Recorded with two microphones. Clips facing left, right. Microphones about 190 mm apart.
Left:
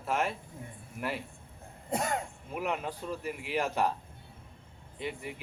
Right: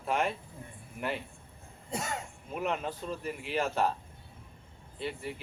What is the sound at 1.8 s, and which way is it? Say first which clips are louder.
Throat clearing: left 5 dB; 55° left (ahead or behind).